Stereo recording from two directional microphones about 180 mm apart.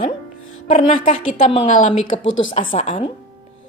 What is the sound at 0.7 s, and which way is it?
A woman's voice, 45° left (ahead or behind).